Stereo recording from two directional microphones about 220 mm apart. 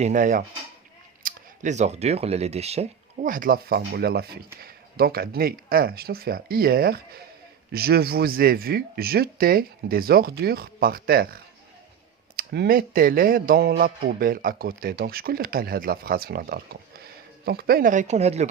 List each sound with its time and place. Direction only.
0.0 s speech: 35° right (ahead or behind)
12.4 s speech: 45° right (ahead or behind); by 18.4 s 30° right (ahead or behind)